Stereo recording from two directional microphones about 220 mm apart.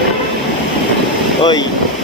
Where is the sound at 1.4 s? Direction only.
20° left (ahead or behind).